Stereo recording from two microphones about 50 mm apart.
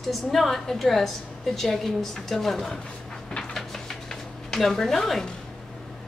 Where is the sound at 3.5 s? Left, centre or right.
Centre.